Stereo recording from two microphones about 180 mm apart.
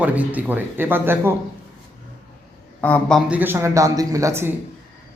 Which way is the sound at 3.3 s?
10° right (ahead or behind).